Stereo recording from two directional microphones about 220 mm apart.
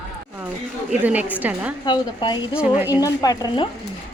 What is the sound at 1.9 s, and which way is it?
Speech, 20° left (ahead or behind).